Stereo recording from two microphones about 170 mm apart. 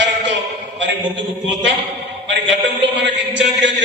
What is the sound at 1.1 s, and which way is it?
A man's voice, 90° right.